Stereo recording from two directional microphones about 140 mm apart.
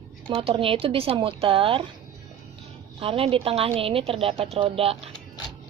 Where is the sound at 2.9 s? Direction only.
45° right (ahead or behind).